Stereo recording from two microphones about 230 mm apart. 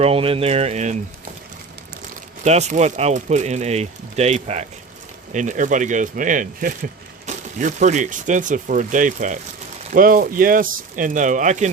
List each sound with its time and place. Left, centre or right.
0.0 s speech: right
2.4 s speech: right